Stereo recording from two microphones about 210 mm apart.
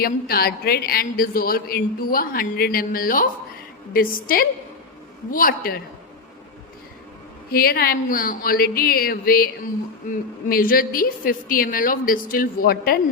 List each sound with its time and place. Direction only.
0.0 s speech: 45° left (ahead or behind)
7.5 s speech: 45° left (ahead or behind)
10.5 s speech: 45° left (ahead or behind)